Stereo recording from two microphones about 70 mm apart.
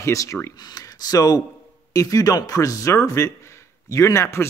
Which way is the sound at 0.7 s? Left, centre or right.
Left.